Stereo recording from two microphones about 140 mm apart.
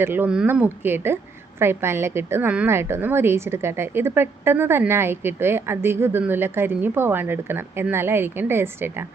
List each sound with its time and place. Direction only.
0.0 s a woman's voice: 15° right (ahead or behind)